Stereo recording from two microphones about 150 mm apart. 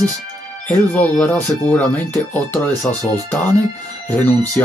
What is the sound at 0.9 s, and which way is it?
Speech, 10° left (ahead or behind).